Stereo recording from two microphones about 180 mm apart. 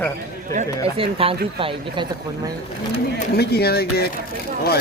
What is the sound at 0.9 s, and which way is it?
Speech, 30° right (ahead or behind).